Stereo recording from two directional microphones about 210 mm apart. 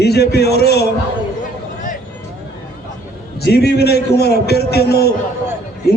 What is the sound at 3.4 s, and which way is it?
A man's voice, 50° left (ahead or behind).